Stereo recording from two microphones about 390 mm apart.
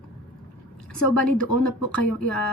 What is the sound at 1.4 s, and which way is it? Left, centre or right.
Speech, left.